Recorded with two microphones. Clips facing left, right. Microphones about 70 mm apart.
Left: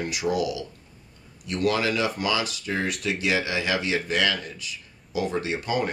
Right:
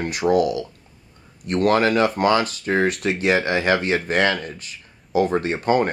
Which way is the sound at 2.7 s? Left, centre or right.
Right.